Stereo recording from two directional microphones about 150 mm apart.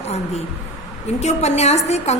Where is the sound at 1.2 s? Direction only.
50° left (ahead or behind).